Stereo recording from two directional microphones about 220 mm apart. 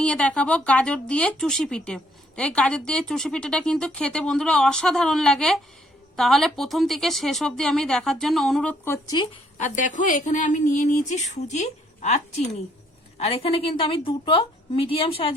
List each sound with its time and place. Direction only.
0.0 s speech: 5° left (ahead or behind)
9.6 s a woman's voice: 35° left (ahead or behind)